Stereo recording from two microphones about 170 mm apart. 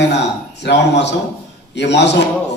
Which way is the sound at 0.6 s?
90° left.